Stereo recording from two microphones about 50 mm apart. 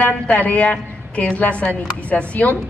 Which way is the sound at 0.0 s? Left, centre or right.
Left.